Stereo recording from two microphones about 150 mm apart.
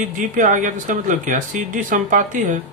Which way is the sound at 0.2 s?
60° right (ahead or behind).